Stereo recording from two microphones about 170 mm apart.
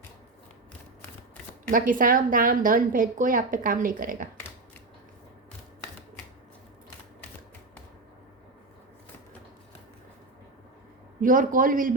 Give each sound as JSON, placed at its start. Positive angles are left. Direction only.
{"t": 1.7, "sound": "a woman's voice", "side_deg": -55}
{"t": 11.2, "sound": "a woman's voice", "side_deg": -50}